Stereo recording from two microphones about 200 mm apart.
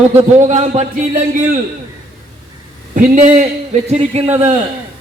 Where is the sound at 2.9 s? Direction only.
40° right (ahead or behind).